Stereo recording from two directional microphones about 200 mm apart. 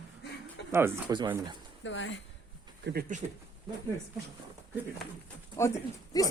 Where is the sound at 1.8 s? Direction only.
70° left (ahead or behind).